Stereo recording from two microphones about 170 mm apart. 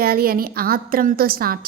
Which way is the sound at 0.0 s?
60° right (ahead or behind).